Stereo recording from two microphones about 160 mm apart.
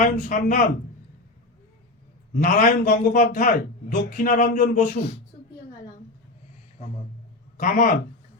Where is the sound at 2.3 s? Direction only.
60° left (ahead or behind).